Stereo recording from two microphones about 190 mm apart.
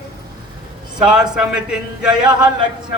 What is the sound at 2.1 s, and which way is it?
Speech, 20° right (ahead or behind).